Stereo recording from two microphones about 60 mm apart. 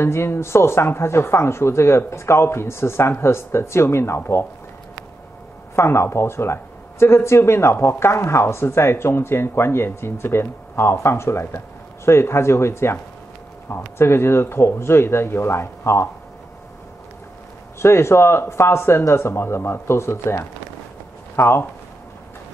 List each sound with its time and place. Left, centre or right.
0.0 s speech: left
5.8 s speech: left
17.7 s speech: left